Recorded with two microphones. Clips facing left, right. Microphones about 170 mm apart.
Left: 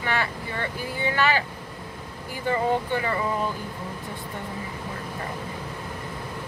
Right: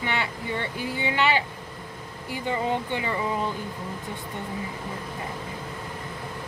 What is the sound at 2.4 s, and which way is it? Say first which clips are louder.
Speech: left 3 dB; 20° right (ahead or behind).